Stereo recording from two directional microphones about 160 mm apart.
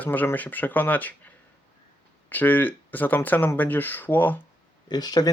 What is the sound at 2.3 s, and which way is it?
Speech, 10° left (ahead or behind).